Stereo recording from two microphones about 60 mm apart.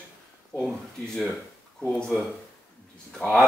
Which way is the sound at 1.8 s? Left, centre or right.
Centre.